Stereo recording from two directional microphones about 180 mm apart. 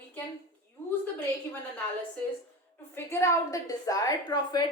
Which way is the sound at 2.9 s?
15° left (ahead or behind).